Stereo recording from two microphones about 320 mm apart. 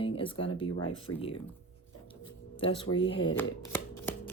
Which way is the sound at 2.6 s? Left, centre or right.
Centre.